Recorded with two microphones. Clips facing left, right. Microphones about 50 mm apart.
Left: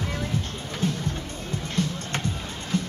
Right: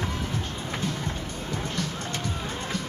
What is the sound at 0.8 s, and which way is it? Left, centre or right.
Music, left.